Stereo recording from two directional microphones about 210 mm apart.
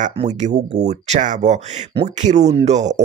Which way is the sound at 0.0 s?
35° right (ahead or behind).